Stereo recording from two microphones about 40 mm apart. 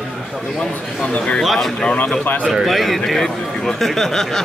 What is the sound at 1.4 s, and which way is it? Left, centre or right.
A man's voice, centre.